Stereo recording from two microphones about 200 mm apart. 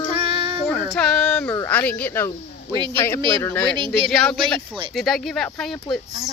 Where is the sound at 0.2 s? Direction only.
25° right (ahead or behind).